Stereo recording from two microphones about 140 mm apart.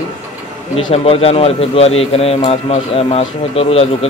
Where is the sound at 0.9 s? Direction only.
45° left (ahead or behind).